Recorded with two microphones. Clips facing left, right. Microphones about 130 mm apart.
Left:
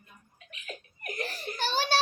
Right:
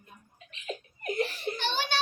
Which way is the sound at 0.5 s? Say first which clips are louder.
Right 5 dB; 25° right (ahead or behind).